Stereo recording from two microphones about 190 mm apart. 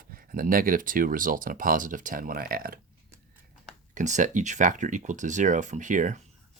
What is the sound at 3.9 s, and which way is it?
Speech, 40° right (ahead or behind).